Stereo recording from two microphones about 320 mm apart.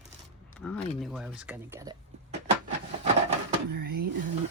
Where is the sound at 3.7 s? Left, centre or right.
Right.